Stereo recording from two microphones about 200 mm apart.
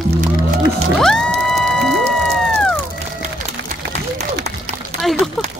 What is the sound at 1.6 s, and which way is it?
Whale vocalization, centre (ahead or behind).